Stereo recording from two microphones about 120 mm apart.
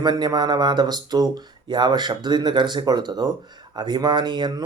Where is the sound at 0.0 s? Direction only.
35° right (ahead or behind).